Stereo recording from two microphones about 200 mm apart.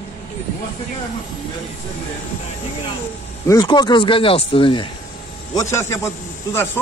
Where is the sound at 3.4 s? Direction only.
20° left (ahead or behind).